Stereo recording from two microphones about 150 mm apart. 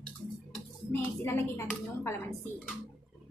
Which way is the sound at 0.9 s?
20° left (ahead or behind).